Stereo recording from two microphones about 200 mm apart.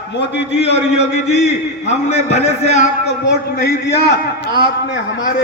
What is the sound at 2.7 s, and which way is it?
Speech, 35° left (ahead or behind).